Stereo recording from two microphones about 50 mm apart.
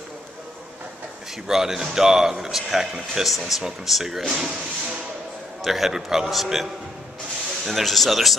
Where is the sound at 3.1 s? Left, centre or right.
Centre.